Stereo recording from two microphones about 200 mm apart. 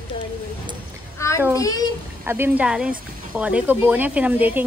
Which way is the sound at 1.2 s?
15° left (ahead or behind).